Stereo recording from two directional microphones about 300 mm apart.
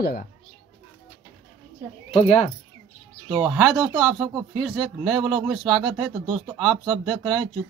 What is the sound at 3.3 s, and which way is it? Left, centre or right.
Speech, centre.